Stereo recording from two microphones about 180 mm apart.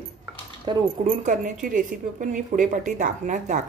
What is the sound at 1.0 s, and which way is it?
Speech, 45° right (ahead or behind).